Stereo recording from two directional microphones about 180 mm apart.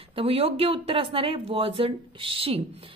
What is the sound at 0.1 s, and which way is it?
A woman's voice, 30° right (ahead or behind).